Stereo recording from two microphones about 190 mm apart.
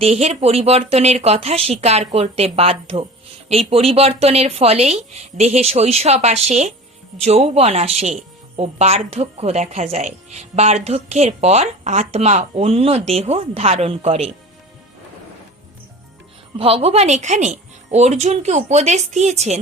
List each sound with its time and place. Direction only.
0.0 s a woman's voice: 35° right (ahead or behind)
16.6 s a woman's voice: 30° right (ahead or behind)